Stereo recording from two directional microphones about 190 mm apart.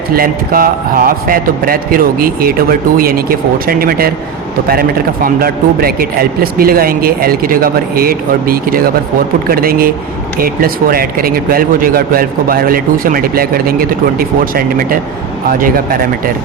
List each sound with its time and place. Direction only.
0.1 s speech: 50° right (ahead or behind)